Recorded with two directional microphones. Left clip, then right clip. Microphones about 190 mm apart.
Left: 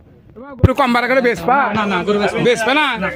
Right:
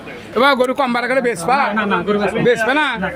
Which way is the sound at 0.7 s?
15° left (ahead or behind).